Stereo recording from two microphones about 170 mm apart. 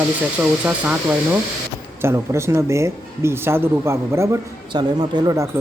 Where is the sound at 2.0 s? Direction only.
15° right (ahead or behind).